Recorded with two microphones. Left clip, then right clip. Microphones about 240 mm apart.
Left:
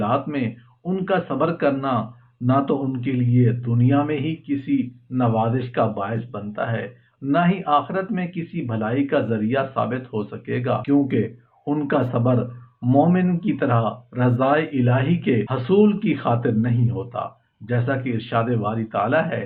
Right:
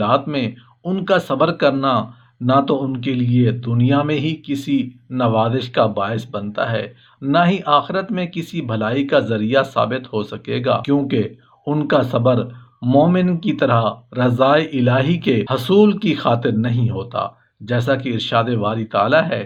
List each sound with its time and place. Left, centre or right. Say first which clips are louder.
0.0 s a man's voice: right 5 dB; right